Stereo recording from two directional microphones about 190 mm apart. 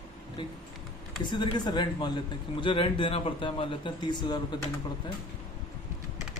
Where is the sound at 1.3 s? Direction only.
25° left (ahead or behind).